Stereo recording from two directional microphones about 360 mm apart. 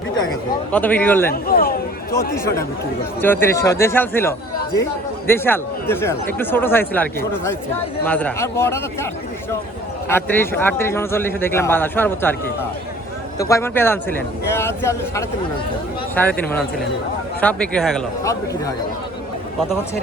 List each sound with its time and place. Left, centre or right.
0.7 s speech: centre
1.3 s a sound: left
2.3 s speech: centre
10.1 s speech: centre
13.4 s speech: centre